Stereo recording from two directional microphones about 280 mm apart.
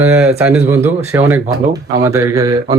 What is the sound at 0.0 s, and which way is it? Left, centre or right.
Speech, centre.